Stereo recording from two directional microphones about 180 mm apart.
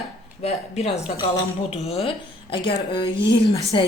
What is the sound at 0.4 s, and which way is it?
A woman's voice, 35° left (ahead or behind).